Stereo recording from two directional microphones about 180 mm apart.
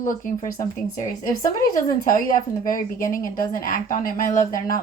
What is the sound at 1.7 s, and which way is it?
A woman's voice, 50° left (ahead or behind).